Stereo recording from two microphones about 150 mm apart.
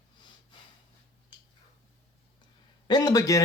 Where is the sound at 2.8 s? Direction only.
30° left (ahead or behind).